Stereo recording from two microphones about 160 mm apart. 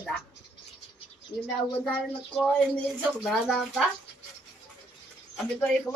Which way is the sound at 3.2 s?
Centre (ahead or behind).